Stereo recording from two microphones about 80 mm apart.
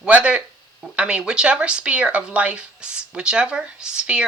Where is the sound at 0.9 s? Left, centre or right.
Centre.